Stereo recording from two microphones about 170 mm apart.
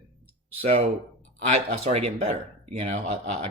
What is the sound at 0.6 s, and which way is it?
Speech, 35° right (ahead or behind).